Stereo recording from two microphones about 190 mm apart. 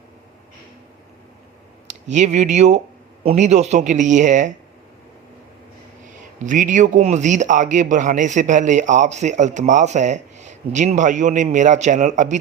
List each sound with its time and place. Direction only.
1.9 s a man's voice: 40° right (ahead or behind)
6.4 s a man's voice: 40° right (ahead or behind)